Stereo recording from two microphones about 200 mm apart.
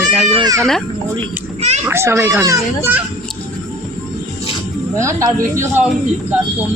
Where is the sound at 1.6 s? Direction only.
35° right (ahead or behind).